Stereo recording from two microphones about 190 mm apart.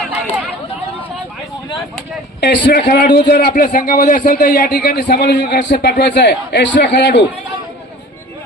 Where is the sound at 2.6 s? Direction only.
60° left (ahead or behind).